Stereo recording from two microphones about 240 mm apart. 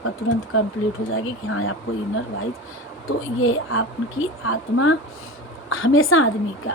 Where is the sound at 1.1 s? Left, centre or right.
Left.